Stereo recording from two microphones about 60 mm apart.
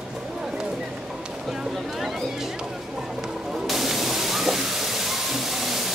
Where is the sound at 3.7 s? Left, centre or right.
Centre.